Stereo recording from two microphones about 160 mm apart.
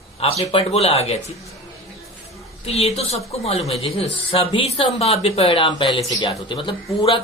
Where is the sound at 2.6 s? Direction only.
40° left (ahead or behind).